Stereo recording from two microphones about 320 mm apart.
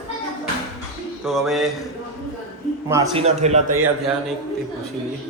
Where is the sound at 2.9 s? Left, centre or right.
Centre.